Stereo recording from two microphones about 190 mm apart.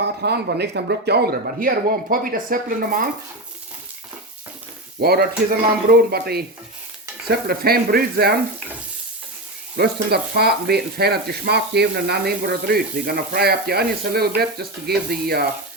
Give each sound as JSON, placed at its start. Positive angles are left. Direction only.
{"t": 0.0, "sound": "speech", "side_deg": -60}
{"t": 4.9, "sound": "speech", "side_deg": -55}
{"t": 9.7, "sound": "speech", "side_deg": -55}